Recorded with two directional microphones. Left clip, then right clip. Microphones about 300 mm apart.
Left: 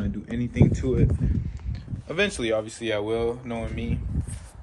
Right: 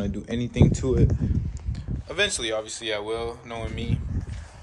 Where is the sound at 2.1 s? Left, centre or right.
Centre.